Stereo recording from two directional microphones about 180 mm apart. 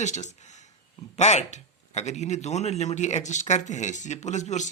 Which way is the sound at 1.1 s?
40° left (ahead or behind).